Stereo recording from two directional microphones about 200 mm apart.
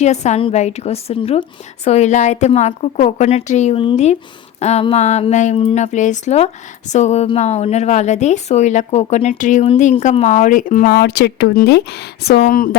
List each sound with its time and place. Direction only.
0.0 s speech: 35° left (ahead or behind)